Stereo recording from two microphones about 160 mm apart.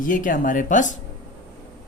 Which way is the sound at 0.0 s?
55° left (ahead or behind).